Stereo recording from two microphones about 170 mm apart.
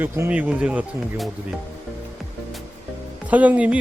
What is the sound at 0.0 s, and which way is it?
Speech, 10° right (ahead or behind).